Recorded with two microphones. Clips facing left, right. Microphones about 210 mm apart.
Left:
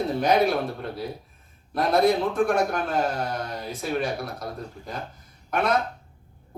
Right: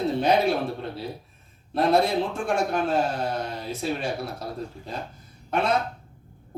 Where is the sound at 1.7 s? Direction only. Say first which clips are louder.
Left 1 dB; 25° right (ahead or behind).